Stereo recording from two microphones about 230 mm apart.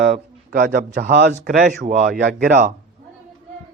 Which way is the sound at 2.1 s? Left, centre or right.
Right.